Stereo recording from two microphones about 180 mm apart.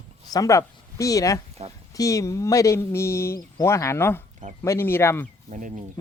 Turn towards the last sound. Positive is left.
turn(degrees=-45)  # may be behind; listen again after turning